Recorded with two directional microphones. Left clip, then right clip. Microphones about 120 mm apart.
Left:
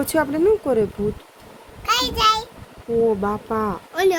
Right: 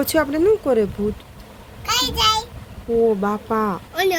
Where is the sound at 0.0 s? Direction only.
10° left (ahead or behind).